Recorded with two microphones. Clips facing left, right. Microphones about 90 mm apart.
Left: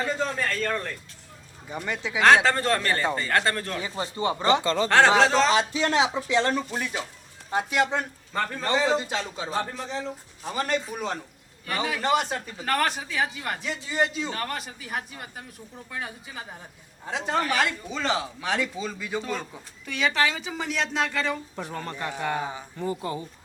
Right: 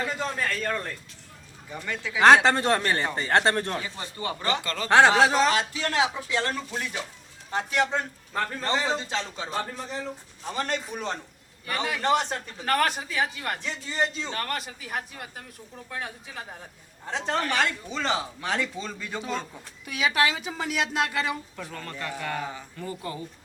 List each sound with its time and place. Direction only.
0.6 s speech: 10° right (ahead or behind)
1.7 s a man's voice: 20° left (ahead or behind)
2.2 s speech: 20° right (ahead or behind)
3.8 s a man's voice: 20° left (ahead or behind)
4.9 s speech: 15° right (ahead or behind)
5.5 s a man's voice: 20° left (ahead or behind)
9.5 s a man's voice: centre (ahead or behind)
21.5 s a man's voice: 25° left (ahead or behind)